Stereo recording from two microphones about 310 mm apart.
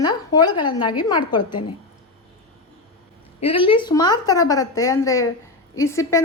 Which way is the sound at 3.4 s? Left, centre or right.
Centre.